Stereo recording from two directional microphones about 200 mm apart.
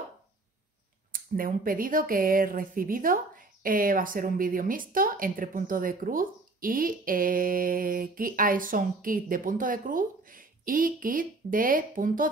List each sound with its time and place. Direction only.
1.1 s speech: 45° right (ahead or behind)